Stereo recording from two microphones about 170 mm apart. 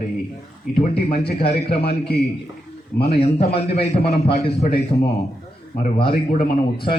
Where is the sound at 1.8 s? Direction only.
65° left (ahead or behind).